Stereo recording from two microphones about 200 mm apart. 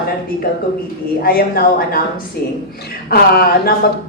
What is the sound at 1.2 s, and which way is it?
Speech, 50° left (ahead or behind).